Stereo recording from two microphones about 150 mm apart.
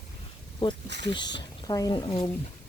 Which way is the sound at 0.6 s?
30° left (ahead or behind).